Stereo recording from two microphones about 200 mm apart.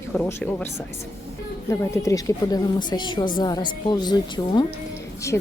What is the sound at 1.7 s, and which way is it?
A woman's voice, 15° left (ahead or behind).